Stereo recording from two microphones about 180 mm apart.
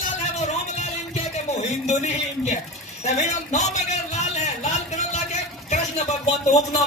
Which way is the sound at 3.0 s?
40° left (ahead or behind).